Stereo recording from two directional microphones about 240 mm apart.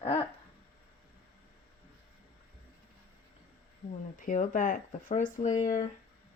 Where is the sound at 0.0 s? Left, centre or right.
Left.